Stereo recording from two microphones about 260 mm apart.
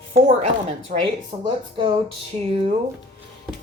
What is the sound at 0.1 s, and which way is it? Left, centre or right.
Speech, right.